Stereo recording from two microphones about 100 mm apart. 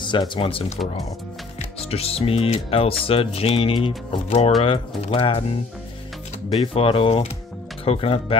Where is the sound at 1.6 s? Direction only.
90° left.